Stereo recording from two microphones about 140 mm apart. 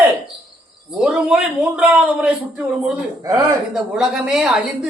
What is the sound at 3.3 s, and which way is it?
Speech, 20° right (ahead or behind).